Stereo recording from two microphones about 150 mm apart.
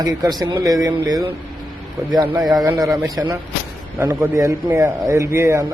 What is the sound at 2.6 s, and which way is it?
A man's voice, 20° right (ahead or behind).